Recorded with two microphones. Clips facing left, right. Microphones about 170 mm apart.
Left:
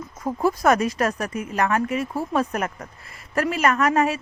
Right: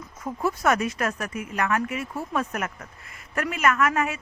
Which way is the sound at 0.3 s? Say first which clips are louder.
Left 4 dB; 35° left (ahead or behind).